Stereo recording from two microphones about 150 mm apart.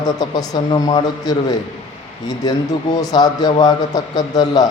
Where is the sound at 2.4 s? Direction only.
25° left (ahead or behind).